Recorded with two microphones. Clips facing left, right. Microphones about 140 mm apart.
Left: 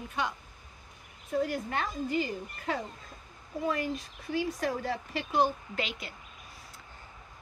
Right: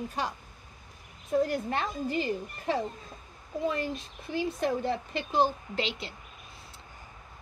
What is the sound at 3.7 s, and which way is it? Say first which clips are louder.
A woman's voice: even; 30° right (ahead or behind).